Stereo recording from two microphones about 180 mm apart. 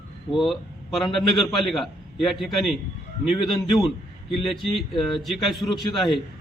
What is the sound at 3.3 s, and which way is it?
Speech, 25° left (ahead or behind).